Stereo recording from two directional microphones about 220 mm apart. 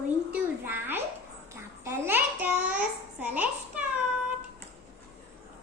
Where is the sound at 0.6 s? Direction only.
10° right (ahead or behind).